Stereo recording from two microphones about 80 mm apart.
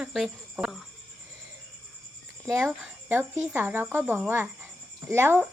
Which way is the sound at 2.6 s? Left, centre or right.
Right.